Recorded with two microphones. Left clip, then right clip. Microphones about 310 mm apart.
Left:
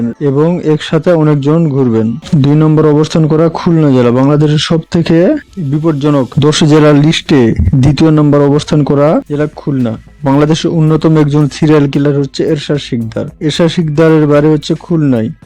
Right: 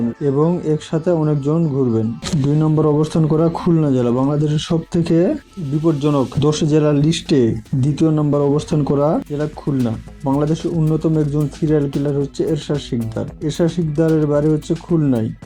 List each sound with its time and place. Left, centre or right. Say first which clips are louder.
0.3 s speech: left 8 dB; left